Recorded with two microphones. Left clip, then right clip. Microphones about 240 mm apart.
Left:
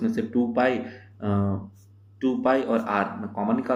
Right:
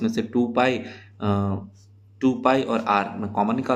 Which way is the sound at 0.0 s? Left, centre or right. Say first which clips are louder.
Right 2 dB; right.